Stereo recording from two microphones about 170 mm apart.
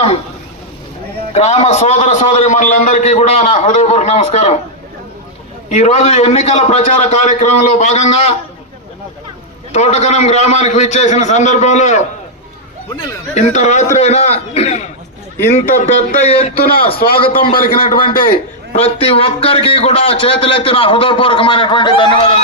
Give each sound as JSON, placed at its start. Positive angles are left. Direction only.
{"t": 1.3, "sound": "speech", "side_deg": 40}
{"t": 5.6, "sound": "speech", "side_deg": 40}
{"t": 9.7, "sound": "a man's voice", "side_deg": 40}
{"t": 13.3, "sound": "a man's voice", "side_deg": 45}
{"t": 17.4, "sound": "a man's voice", "side_deg": 60}
{"t": 18.8, "sound": "speech", "side_deg": 35}